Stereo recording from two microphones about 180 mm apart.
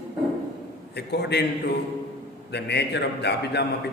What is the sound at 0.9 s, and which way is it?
Speech, 70° left (ahead or behind).